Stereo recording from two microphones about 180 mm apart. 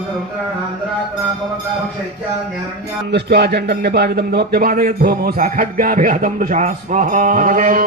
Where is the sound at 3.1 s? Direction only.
65° right (ahead or behind).